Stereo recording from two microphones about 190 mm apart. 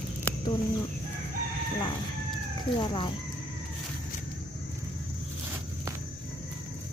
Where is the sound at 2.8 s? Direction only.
25° left (ahead or behind).